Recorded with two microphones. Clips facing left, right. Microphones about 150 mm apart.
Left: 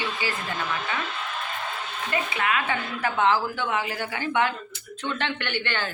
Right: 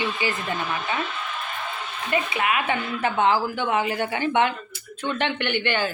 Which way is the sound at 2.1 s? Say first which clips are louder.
Right 3 dB; 20° right (ahead or behind).